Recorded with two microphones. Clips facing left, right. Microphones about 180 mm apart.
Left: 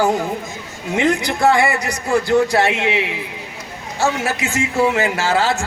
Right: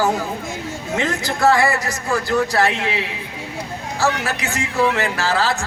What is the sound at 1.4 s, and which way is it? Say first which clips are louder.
Speech: even; 25° left (ahead or behind).